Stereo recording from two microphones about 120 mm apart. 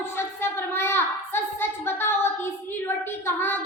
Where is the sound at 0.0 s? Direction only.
20° left (ahead or behind).